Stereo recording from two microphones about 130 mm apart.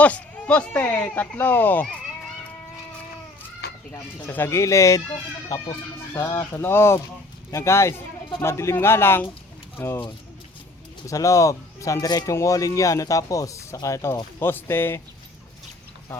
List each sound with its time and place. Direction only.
0.0 s speech: 10° left (ahead or behind)
3.9 s speech: 15° left (ahead or behind)
6.1 s speech: 20° left (ahead or behind)
11.0 s speech: 25° left (ahead or behind)